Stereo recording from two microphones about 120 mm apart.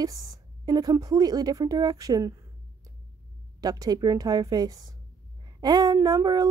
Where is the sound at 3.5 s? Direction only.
30° right (ahead or behind).